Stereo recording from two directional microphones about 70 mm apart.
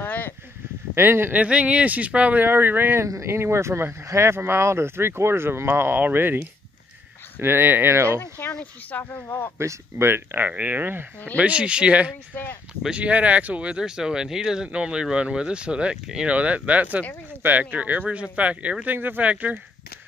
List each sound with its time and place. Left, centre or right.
0.0 s a sound: left
0.9 s speech: right
1.3 s speech: centre
3.0 s speech: right
8.2 s speech: left
9.6 s speech: right
11.3 s speech: centre